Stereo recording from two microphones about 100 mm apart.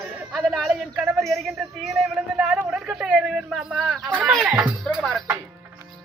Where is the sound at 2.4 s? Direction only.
5° right (ahead or behind).